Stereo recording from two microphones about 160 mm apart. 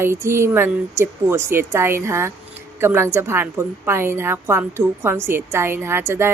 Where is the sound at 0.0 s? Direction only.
15° right (ahead or behind).